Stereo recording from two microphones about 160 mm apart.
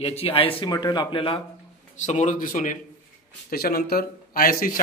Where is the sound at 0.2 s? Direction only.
35° left (ahead or behind).